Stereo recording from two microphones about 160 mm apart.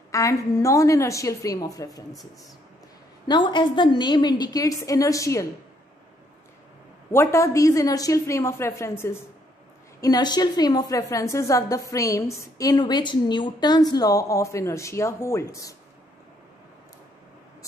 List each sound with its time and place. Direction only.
0.1 s a woman's voice: 20° left (ahead or behind)
3.3 s a woman's voice: 30° left (ahead or behind)
7.1 s a woman's voice: 15° left (ahead or behind)